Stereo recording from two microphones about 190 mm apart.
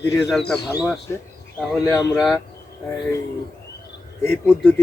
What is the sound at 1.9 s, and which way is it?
Speech, 15° left (ahead or behind).